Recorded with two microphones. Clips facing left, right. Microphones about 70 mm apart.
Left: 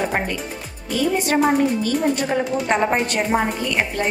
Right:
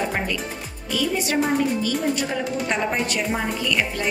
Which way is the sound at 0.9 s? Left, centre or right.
Left.